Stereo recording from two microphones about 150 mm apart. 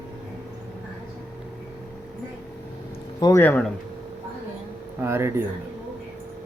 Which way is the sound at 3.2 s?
25° left (ahead or behind).